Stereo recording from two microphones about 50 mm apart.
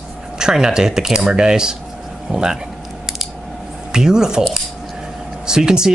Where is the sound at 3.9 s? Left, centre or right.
Centre.